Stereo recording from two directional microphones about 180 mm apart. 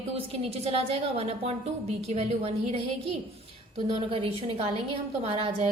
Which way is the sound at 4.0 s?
30° right (ahead or behind).